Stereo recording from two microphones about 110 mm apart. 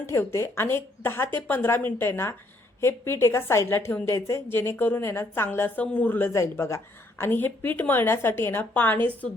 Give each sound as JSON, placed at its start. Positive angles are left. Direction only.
{"t": 0.0, "sound": "a woman's voice", "side_deg": 25}